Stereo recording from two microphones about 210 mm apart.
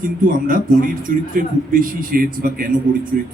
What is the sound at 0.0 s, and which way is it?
A man's voice, 40° right (ahead or behind).